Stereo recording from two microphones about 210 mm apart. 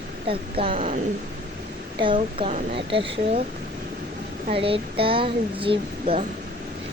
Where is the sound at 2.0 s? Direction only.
25° right (ahead or behind).